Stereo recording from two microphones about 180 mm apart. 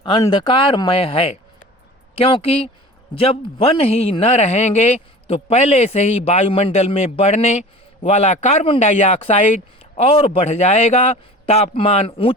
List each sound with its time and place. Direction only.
0.0 s a man's voice: 25° left (ahead or behind)